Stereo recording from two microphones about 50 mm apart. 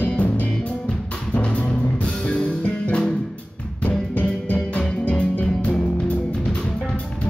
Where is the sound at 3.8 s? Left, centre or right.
Left.